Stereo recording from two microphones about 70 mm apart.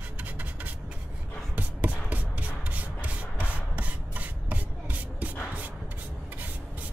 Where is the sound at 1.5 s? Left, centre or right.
Right.